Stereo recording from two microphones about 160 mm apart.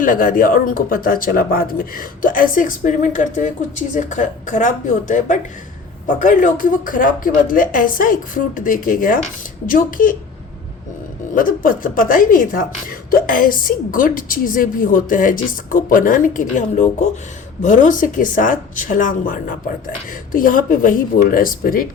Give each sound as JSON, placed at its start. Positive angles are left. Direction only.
{"t": 0.0, "sound": "speech", "side_deg": 60}
{"t": 11.3, "sound": "speech", "side_deg": 60}